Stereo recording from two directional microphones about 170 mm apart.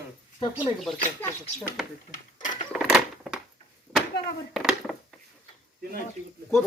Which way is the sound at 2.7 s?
Centre (ahead or behind).